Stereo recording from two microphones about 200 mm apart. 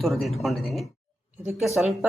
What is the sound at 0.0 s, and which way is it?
Speech, centre (ahead or behind).